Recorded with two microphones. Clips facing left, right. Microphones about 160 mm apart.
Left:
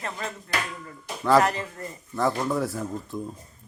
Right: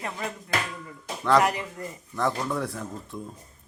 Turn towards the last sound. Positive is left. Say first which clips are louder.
# left 5 dB
turn(degrees=0)  # may be behind; listen again after turning